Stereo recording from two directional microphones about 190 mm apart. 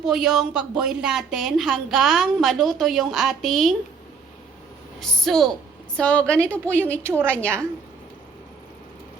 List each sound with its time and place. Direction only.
0.0 s a woman's voice: centre (ahead or behind)
4.9 s a woman's voice: centre (ahead or behind)
7.1 s a woman's voice: 10° right (ahead or behind)